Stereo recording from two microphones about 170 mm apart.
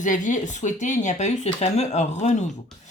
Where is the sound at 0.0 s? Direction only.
50° left (ahead or behind).